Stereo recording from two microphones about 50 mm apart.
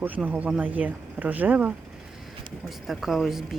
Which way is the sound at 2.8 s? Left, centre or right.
Centre.